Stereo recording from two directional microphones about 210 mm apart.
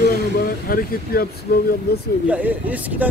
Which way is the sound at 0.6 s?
45° left (ahead or behind).